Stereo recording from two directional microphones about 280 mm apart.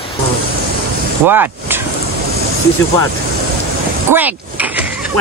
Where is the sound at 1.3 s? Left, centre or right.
Centre.